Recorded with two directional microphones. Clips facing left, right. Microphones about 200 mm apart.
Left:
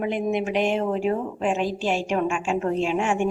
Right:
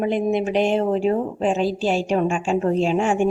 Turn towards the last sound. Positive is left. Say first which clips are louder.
# right 4 dB
turn(degrees=-35)  # may be behind; listen again after turning